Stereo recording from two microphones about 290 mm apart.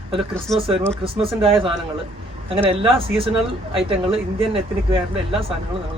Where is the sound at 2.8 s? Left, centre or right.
Centre.